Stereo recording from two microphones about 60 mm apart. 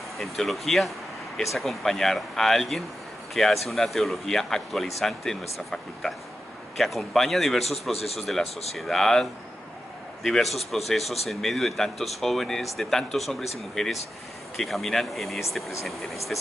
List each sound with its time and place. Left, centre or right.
0.2 s a man's voice: centre